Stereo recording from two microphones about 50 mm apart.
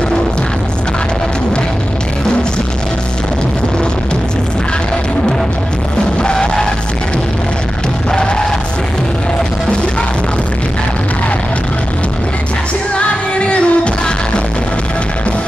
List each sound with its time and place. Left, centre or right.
6.2 s music: centre
8.1 s music: centre
12.9 s music: left